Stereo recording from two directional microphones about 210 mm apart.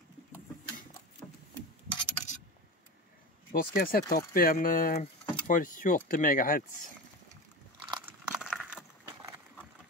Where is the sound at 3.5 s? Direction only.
45° left (ahead or behind).